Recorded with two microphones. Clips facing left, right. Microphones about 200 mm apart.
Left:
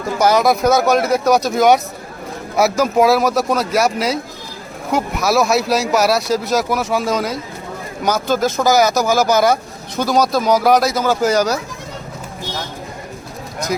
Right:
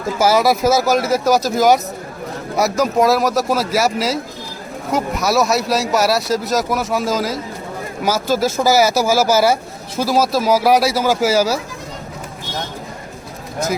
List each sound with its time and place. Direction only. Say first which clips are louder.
0.2 s speech: left 1 dB; 5° right (ahead or behind)